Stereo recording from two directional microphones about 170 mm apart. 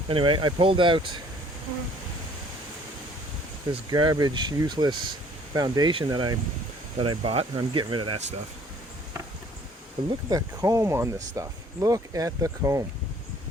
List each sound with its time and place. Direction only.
0.1 s speech: 30° right (ahead or behind)
3.7 s speech: 25° right (ahead or behind)
10.1 s speech: 20° right (ahead or behind)